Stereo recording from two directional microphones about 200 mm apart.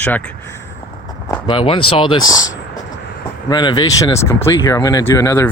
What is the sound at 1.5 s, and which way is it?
Speech, 25° left (ahead or behind).